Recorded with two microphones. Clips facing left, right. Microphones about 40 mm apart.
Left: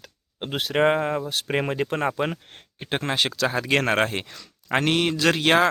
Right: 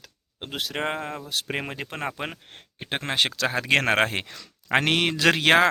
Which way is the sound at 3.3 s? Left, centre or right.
Right.